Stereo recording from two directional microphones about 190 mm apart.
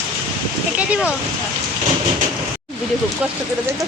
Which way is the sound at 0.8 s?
5° right (ahead or behind).